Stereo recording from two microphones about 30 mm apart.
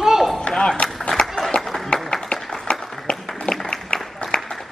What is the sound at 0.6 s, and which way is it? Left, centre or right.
Speech, left.